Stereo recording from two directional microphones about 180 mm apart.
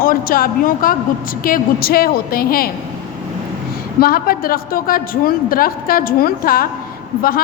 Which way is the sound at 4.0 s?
55° left (ahead or behind).